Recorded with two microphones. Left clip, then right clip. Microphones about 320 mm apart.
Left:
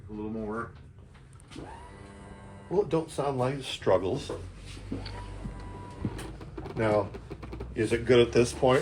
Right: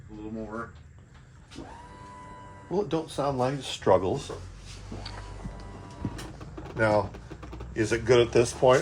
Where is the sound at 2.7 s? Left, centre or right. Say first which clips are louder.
Left 1 dB; right.